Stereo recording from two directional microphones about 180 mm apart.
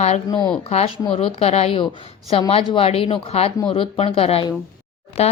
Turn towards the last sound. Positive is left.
turn(degrees=35)  # may be behind; listen again after turning